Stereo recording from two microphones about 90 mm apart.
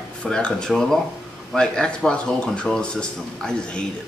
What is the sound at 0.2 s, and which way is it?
A woman's voice, 10° left (ahead or behind).